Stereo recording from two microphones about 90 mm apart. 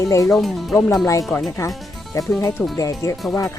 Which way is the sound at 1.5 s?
35° left (ahead or behind).